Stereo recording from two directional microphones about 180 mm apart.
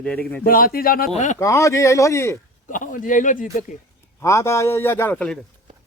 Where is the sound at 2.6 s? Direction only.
45° left (ahead or behind).